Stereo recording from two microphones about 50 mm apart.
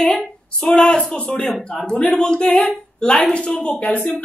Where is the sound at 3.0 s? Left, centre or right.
Left.